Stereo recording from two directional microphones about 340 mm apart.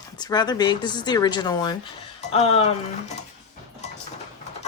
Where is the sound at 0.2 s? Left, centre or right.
Centre.